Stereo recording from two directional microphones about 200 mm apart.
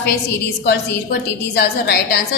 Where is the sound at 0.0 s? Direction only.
60° left (ahead or behind).